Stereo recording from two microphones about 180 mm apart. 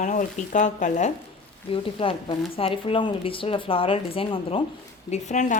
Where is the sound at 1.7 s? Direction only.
30° left (ahead or behind).